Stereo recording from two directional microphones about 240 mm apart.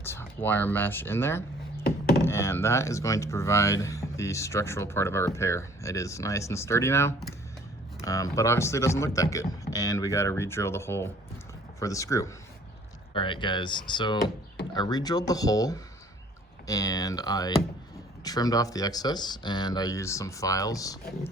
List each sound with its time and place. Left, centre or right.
0.0 s speech: centre